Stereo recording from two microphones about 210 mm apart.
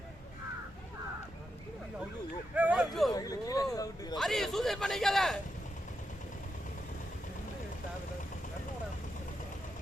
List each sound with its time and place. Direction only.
2.6 s a man's voice: 5° right (ahead or behind)
3.1 s speech: 15° left (ahead or behind)
4.2 s a man's voice: centre (ahead or behind)